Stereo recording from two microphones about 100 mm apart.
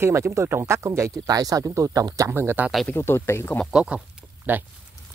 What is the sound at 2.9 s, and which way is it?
Speech, 25° left (ahead or behind).